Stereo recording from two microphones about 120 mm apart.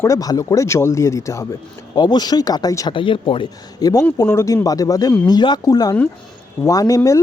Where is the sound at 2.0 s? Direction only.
35° left (ahead or behind).